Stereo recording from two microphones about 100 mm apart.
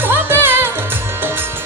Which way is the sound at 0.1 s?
20° right (ahead or behind).